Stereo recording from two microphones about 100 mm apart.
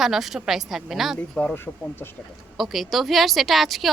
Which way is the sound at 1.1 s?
15° left (ahead or behind).